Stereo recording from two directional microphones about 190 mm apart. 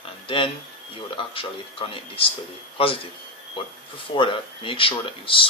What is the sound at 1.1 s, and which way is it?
Speech, 30° left (ahead or behind).